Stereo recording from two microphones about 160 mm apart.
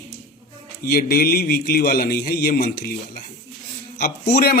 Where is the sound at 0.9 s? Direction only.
70° left (ahead or behind).